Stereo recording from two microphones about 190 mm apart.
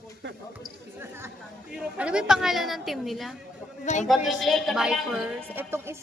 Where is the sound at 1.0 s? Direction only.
15° right (ahead or behind).